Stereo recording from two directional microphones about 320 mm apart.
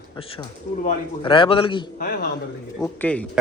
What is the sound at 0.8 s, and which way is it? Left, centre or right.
A man's voice, centre.